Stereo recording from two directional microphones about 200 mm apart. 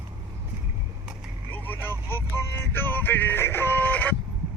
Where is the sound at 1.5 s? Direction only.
10° left (ahead or behind).